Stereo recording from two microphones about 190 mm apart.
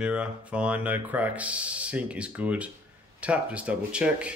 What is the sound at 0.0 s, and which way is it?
Speech, 5° right (ahead or behind).